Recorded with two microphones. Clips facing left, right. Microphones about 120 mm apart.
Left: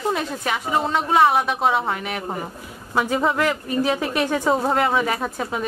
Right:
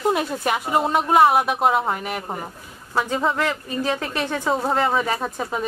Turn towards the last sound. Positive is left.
turn(degrees=0)  # may be behind; listen again after turning